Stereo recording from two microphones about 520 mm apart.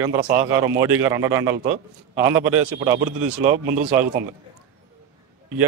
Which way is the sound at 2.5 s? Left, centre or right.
Right.